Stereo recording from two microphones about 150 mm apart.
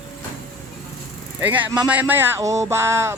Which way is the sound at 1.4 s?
10° right (ahead or behind).